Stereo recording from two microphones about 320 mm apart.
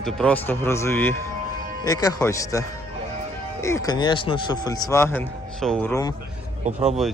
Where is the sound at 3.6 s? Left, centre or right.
Centre.